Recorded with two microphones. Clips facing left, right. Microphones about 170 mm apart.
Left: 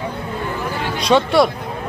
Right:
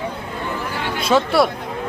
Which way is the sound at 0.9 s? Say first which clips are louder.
Left 2 dB; 5° right (ahead or behind).